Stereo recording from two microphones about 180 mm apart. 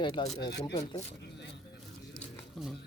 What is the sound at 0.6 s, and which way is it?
Speech, 25° left (ahead or behind).